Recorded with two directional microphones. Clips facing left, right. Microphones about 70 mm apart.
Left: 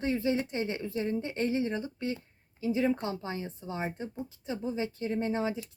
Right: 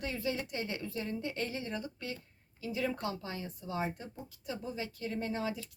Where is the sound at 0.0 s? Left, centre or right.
Left.